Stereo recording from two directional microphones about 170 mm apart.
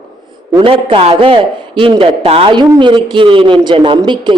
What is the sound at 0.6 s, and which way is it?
A man's voice, 30° right (ahead or behind).